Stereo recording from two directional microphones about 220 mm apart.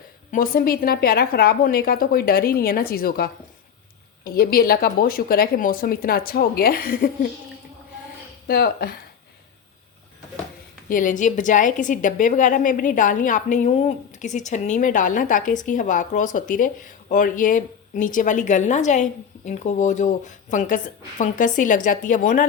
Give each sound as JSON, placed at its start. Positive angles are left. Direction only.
{"t": 0.3, "sound": "a woman's voice", "side_deg": 40}
{"t": 8.4, "sound": "a woman's voice", "side_deg": 45}
{"t": 10.8, "sound": "a woman's voice", "side_deg": 35}